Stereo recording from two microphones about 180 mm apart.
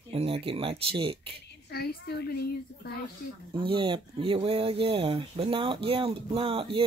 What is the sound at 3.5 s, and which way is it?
Speech, 30° right (ahead or behind).